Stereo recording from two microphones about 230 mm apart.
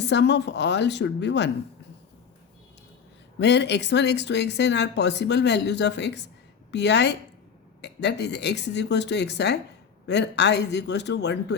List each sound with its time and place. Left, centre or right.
0.0 s speech: left
3.3 s speech: left